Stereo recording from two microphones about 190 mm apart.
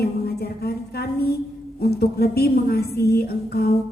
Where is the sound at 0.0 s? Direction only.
55° left (ahead or behind).